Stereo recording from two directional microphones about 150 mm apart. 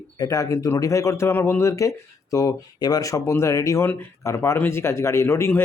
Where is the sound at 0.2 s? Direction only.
25° left (ahead or behind).